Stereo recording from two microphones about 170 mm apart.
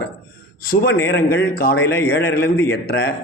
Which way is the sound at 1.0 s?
85° left.